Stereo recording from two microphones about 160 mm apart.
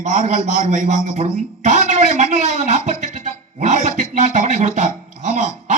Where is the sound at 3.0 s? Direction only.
50° right (ahead or behind).